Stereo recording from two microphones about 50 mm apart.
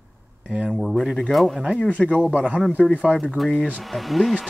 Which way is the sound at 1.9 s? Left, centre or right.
Left.